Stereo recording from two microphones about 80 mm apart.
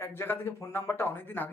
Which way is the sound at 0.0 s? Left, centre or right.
Left.